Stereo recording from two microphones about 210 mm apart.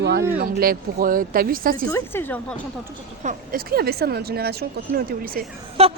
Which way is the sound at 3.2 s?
40° right (ahead or behind).